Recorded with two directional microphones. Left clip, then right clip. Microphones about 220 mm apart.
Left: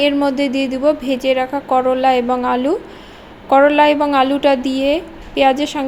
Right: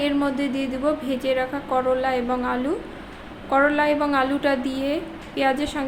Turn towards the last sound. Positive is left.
turn(degrees=25)  # may be behind; listen again after turning